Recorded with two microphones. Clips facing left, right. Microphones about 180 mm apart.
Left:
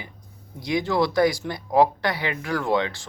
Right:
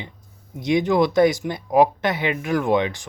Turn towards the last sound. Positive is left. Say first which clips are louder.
# right 4 dB
turn(degrees=-15)  # may be behind; listen again after turning